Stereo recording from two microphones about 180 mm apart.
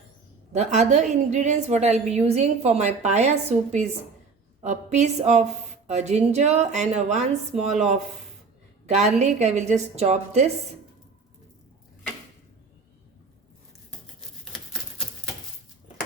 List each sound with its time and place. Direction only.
0.5 s a woman's voice: 40° right (ahead or behind)
8.9 s a woman's voice: 40° right (ahead or behind)